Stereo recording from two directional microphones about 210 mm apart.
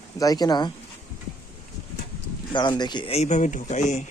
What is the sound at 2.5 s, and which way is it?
Speech, 20° left (ahead or behind).